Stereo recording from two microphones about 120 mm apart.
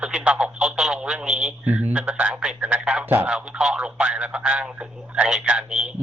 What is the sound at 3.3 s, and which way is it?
Speech, 5° right (ahead or behind).